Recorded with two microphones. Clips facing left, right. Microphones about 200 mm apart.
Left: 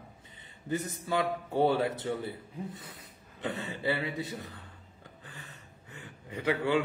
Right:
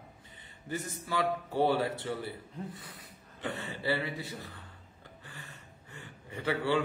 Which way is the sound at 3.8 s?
20° left (ahead or behind).